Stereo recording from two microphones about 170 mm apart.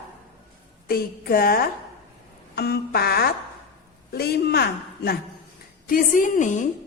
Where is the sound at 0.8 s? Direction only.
60° left (ahead or behind).